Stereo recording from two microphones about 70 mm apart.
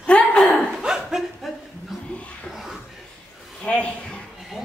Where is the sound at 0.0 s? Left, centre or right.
Centre.